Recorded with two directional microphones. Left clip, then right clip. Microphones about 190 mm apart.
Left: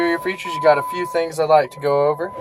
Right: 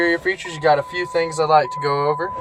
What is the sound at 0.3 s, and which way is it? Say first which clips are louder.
Speech: left 1 dB; 25° left (ahead or behind).